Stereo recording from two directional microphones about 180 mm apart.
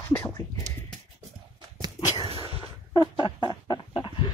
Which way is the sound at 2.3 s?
30° right (ahead or behind).